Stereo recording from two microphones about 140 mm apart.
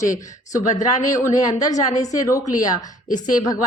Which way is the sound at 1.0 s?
25° left (ahead or behind).